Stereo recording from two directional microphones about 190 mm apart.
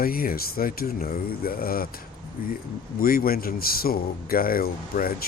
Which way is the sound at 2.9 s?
50° left (ahead or behind).